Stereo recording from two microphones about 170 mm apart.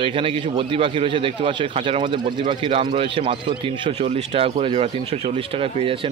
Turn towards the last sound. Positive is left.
turn(degrees=-35)  # may be behind; listen again after turning